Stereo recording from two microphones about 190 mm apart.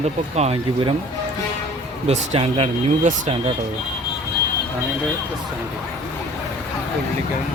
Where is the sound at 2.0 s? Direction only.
30° right (ahead or behind).